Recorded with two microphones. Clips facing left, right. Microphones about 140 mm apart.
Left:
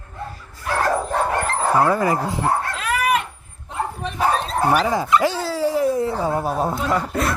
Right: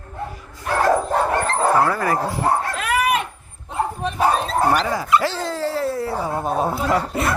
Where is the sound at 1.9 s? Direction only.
20° left (ahead or behind).